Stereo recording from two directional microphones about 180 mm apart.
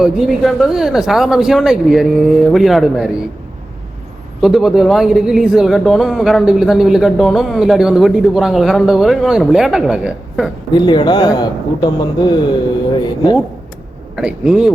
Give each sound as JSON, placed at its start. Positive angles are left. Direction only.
{"t": 0.0, "sound": "speech", "side_deg": 0}
{"t": 4.4, "sound": "speech", "side_deg": 0}
{"t": 10.8, "sound": "a man's voice", "side_deg": 25}
{"t": 14.2, "sound": "speech", "side_deg": -5}